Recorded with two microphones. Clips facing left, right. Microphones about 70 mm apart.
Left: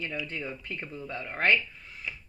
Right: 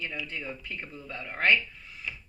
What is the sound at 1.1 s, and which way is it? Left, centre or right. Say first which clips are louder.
Speech: even; left.